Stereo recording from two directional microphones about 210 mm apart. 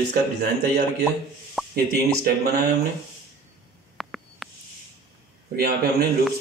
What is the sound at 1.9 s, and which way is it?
Speech, 50° right (ahead or behind).